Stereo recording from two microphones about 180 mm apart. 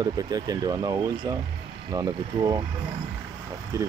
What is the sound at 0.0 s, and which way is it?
Speech, 20° right (ahead or behind).